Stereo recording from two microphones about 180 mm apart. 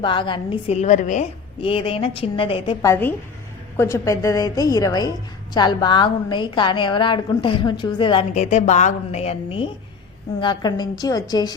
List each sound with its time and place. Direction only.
0.0 s a woman's voice: 25° left (ahead or behind); by 1.3 s 45° left (ahead or behind)
1.6 s a woman's voice: 30° left (ahead or behind)
2.8 s a woman's voice: 15° left (ahead or behind)
8.3 s a woman's voice: 40° left (ahead or behind); by 11.5 s 20° left (ahead or behind)